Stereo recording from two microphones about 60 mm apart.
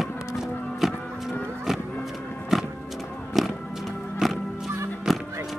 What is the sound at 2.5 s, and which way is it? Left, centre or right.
Music, centre.